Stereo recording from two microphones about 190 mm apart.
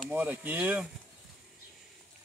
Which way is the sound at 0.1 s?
10° right (ahead or behind).